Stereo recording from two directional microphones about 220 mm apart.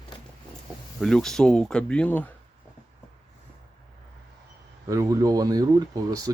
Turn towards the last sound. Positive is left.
turn(degrees=-15)  # may be behind; listen again after turning